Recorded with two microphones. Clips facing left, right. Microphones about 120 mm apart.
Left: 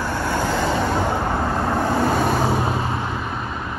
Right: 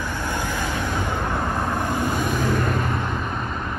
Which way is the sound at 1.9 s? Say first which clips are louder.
Left 5 dB; 15° right (ahead or behind).